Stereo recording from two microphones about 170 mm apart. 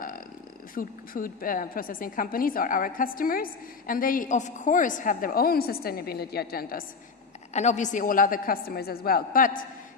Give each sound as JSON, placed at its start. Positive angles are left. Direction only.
{"t": 0.8, "sound": "a woman's voice", "side_deg": 55}
{"t": 7.5, "sound": "a woman's voice", "side_deg": 45}